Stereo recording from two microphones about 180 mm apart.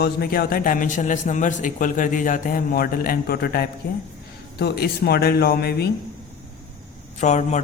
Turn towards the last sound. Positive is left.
turn(degrees=40)  # may be behind; listen again after turning